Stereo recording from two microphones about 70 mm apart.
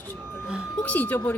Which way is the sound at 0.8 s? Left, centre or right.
Left.